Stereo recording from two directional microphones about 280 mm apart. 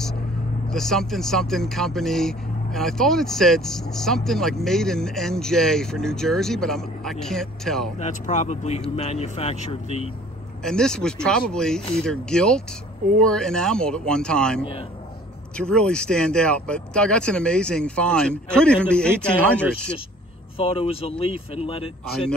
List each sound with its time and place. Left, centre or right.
0.7 s speech: centre
8.0 s speech: left
10.6 s speech: centre
20.5 s speech: centre